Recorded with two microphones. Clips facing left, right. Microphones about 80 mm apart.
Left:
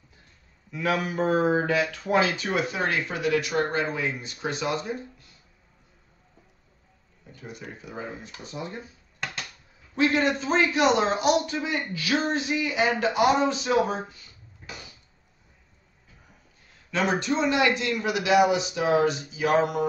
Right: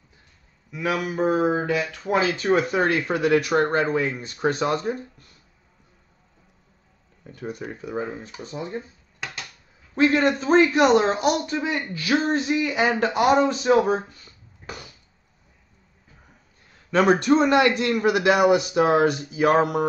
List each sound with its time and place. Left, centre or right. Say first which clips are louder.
0.7 s a man's voice: right 1 dB; centre
1.5 s a sound: even; centre
2.3 s speech: right 7 dB; right
7.2 s speech: right 8 dB; right
7.8 s a woman's voice: right 7 dB; right
10.1 s a woman's voice: right 8 dB; right
16.9 s speech: right 7 dB; right